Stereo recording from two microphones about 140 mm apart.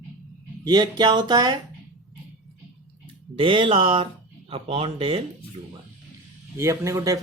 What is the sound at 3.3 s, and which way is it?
Speech, 40° right (ahead or behind).